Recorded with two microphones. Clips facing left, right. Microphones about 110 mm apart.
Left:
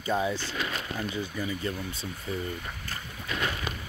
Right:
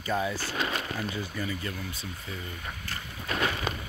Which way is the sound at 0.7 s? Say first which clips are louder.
Right 1 dB; 5° right (ahead or behind).